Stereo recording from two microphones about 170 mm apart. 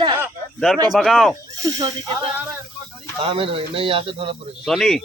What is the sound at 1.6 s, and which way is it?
Speech, 20° right (ahead or behind).